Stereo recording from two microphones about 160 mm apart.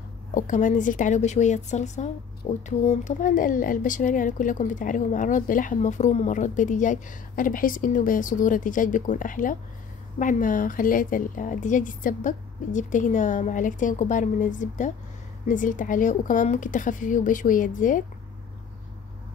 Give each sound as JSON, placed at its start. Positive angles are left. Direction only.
{"t": 0.3, "sound": "speech", "side_deg": 55}